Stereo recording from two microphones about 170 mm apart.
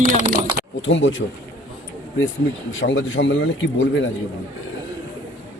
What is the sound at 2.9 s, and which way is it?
Speech, 90° left.